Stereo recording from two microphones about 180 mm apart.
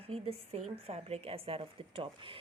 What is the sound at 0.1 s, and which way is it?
Speech, 35° right (ahead or behind).